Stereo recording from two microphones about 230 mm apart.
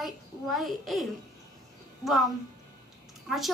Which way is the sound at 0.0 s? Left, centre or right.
Centre.